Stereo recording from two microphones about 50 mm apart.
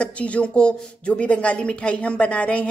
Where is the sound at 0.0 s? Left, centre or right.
Left.